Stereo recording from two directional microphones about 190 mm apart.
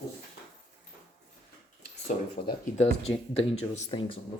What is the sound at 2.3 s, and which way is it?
Speech, 35° left (ahead or behind).